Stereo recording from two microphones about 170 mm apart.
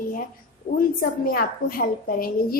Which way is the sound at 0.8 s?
60° left (ahead or behind).